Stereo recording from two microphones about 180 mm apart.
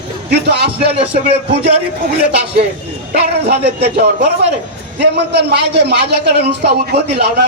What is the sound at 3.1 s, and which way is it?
Music, 60° right (ahead or behind).